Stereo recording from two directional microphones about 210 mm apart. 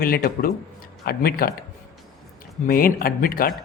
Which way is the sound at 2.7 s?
45° left (ahead or behind).